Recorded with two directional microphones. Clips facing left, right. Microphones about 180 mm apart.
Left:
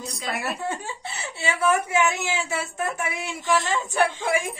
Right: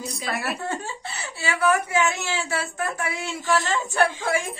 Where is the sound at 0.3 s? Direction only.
15° left (ahead or behind).